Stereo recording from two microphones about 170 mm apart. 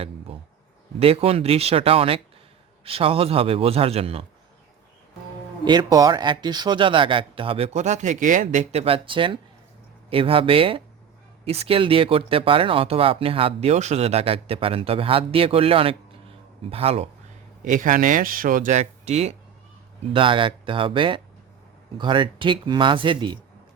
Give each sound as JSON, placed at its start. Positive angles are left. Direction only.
{"t": 0.3, "sound": "insect", "side_deg": -35}
{"t": 0.9, "sound": "speech", "side_deg": -35}
{"t": 5.6, "sound": "speech", "side_deg": -25}
{"t": 17.7, "sound": "speech", "side_deg": -50}
{"t": 20.1, "sound": "speech", "side_deg": -30}